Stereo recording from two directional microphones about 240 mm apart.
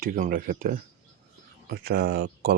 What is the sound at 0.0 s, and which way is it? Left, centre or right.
Speech, right.